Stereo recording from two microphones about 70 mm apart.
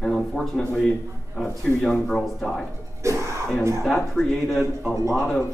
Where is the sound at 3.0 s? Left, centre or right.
Right.